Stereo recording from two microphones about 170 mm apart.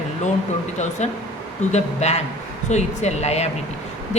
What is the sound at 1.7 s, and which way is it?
Speech, 40° left (ahead or behind).